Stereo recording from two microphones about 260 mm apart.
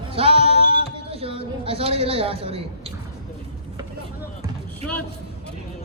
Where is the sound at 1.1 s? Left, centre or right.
Right.